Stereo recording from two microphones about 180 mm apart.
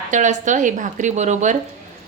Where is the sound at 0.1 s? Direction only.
45° right (ahead or behind).